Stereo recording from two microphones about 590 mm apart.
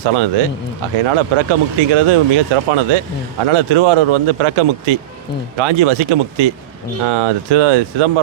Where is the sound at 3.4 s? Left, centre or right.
Right.